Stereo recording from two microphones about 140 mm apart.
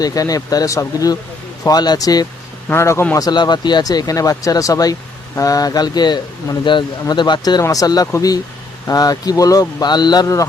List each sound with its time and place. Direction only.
0.0 s a man's voice: 25° left (ahead or behind)
3.2 s speech: 30° left (ahead or behind)